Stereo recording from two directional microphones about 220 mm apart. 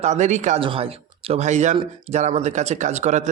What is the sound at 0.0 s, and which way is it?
Speech, 30° right (ahead or behind).